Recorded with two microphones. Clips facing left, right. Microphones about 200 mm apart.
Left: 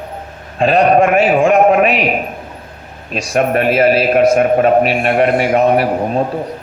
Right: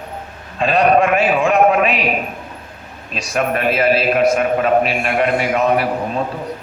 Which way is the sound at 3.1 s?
45° left (ahead or behind).